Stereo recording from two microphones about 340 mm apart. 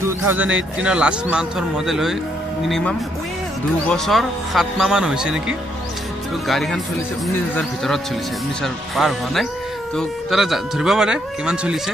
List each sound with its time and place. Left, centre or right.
0.0 s a man's voice: centre